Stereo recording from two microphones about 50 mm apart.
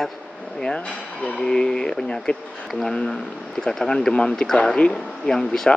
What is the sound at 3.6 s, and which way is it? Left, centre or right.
Speech, centre.